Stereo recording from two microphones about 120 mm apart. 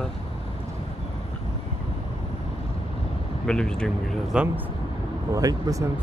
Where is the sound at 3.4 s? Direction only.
5° left (ahead or behind).